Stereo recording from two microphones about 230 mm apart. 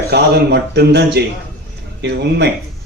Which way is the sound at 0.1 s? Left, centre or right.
Right.